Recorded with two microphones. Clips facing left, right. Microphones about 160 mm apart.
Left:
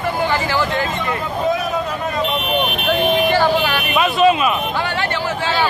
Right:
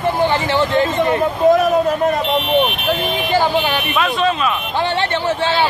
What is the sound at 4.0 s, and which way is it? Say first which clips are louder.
Speech: left 4 dB; 5° left (ahead or behind).